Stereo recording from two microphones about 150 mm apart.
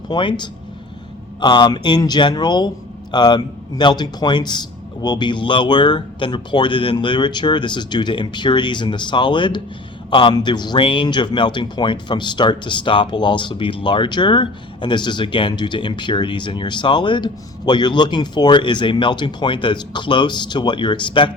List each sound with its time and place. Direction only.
0.1 s a man's voice: 30° left (ahead or behind)